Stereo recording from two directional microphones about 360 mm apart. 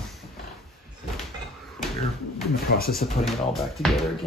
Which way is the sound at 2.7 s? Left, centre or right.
Left.